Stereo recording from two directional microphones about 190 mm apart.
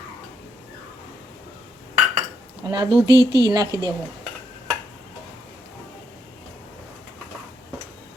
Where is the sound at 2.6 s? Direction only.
25° right (ahead or behind).